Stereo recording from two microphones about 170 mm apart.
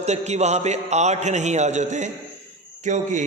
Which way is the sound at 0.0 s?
40° right (ahead or behind).